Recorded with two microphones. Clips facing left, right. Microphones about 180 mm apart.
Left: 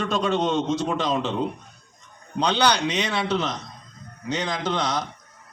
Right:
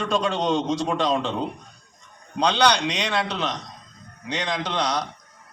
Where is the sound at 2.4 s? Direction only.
5° left (ahead or behind).